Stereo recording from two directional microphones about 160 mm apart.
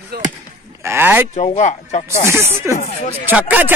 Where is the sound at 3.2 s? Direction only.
10° right (ahead or behind).